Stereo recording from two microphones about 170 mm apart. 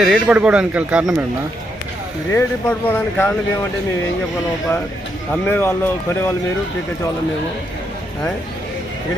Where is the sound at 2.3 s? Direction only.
10° left (ahead or behind).